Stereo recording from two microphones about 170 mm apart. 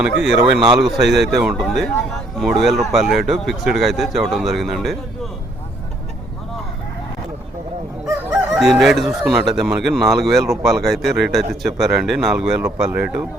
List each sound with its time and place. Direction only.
0.0 s speech: 5° right (ahead or behind)
8.5 s speech: centre (ahead or behind)